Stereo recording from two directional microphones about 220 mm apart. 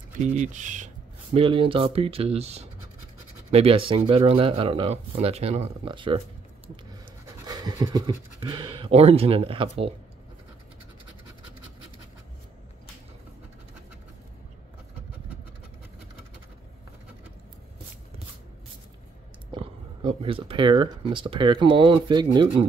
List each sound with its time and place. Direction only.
0.2 s speech: 35° right (ahead or behind)
7.4 s speech: 20° right (ahead or behind)
19.5 s speech: 20° right (ahead or behind)